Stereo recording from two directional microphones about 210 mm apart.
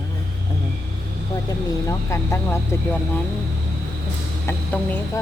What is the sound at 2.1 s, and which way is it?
Speech, 10° left (ahead or behind).